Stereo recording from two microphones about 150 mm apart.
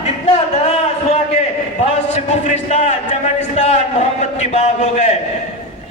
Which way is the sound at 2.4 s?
55° left (ahead or behind).